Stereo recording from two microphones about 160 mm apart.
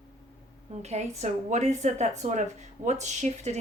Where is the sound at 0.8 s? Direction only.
45° right (ahead or behind).